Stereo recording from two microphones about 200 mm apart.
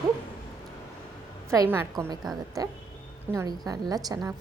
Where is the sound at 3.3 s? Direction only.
20° right (ahead or behind).